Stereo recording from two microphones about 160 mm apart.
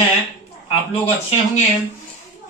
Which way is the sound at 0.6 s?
35° left (ahead or behind).